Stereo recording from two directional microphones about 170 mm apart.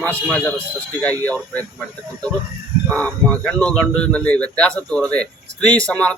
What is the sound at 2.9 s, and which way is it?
Speech, 10° left (ahead or behind).